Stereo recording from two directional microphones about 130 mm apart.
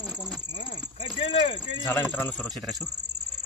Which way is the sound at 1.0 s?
45° left (ahead or behind).